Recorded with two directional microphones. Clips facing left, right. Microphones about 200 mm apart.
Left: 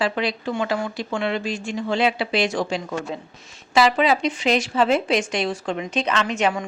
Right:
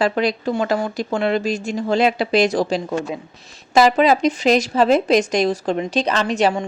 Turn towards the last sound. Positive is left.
turn(degrees=-35)  # may be behind; listen again after turning